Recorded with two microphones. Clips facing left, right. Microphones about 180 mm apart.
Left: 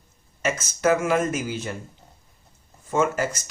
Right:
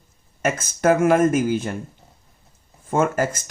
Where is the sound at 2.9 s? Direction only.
50° right (ahead or behind).